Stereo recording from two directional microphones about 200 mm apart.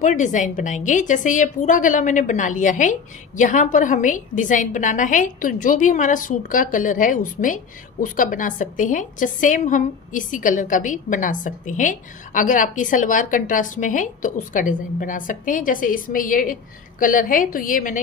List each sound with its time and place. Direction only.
0.0 s a woman's voice: 40° left (ahead or behind)